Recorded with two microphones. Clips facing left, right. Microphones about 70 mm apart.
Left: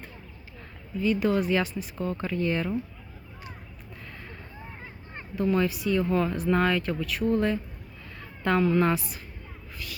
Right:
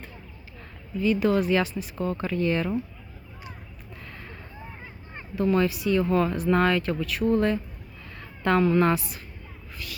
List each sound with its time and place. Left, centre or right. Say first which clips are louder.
1.0 s speech: right 2 dB; right
4.0 s a sound: right 1 dB; right
4.6 s vehicle: right 1 dB; centre
5.4 s a woman's voice: right 2 dB; right